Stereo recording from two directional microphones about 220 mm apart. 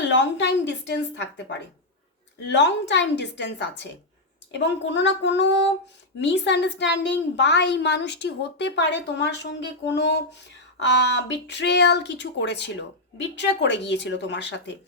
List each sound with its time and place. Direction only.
0.1 s a woman's voice: 55° left (ahead or behind)